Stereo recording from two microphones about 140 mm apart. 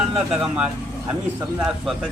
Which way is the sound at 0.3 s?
10° right (ahead or behind).